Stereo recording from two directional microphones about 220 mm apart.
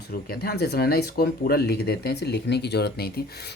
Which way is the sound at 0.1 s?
45° left (ahead or behind).